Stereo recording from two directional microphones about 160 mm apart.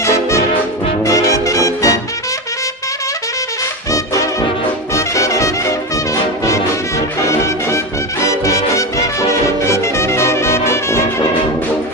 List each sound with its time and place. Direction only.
0.0 s music: 20° left (ahead or behind)
3.9 s music: 20° left (ahead or behind)
7.2 s music: 20° left (ahead or behind)